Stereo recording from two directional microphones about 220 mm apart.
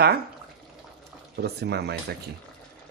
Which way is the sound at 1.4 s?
50° right (ahead or behind).